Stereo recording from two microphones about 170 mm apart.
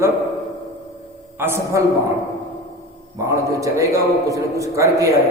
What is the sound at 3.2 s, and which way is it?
A man's voice, 20° right (ahead or behind).